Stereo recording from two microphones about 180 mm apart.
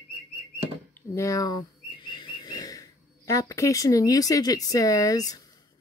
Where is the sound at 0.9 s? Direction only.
15° left (ahead or behind).